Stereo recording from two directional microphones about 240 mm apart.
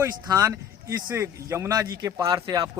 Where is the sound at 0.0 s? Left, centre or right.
Centre.